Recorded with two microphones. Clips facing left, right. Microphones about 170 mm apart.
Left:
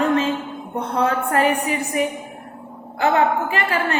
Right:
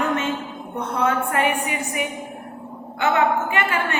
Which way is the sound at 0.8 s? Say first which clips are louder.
Left 1 dB; 35° left (ahead or behind).